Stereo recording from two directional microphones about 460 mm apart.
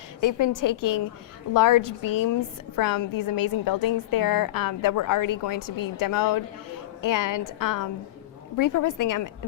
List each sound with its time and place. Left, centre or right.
0.2 s a woman's voice: left